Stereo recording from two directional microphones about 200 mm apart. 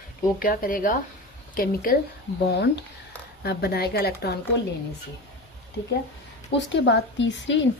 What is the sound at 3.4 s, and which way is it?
Speech, 50° left (ahead or behind).